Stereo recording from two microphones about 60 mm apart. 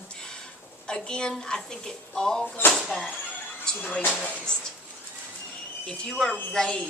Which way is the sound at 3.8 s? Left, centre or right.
Left.